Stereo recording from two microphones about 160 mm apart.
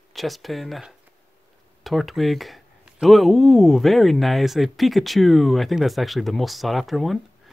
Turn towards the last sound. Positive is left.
turn(degrees=0)  # may be behind; listen again after turning